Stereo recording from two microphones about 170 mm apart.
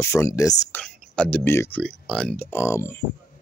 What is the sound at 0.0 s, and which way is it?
Speech, 15° left (ahead or behind).